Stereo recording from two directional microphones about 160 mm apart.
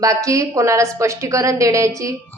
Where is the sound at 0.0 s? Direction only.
20° right (ahead or behind).